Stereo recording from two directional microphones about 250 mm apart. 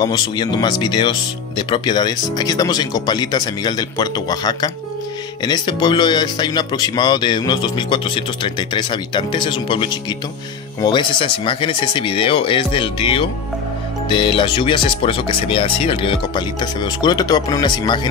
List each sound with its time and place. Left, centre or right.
0.0 s speech: centre